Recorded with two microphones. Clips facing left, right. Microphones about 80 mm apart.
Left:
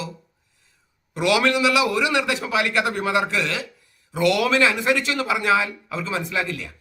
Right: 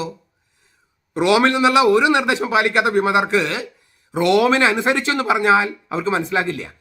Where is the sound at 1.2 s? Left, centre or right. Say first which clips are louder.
Right 4 dB; right.